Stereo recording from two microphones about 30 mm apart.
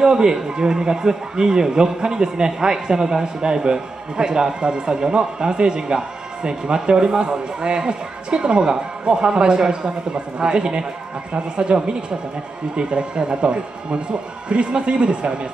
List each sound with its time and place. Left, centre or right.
0.0 s a man's voice: right